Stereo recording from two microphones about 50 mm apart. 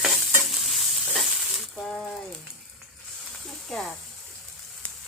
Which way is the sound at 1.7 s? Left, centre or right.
Centre.